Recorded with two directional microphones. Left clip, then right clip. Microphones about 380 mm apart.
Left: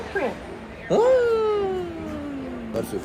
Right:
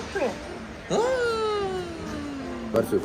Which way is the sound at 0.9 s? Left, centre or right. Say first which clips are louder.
Left 6 dB; centre.